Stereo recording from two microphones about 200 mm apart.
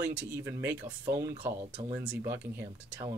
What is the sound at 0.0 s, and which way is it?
Speech, 10° right (ahead or behind).